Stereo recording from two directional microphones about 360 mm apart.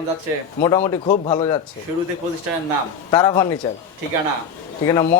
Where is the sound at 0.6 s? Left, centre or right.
Centre.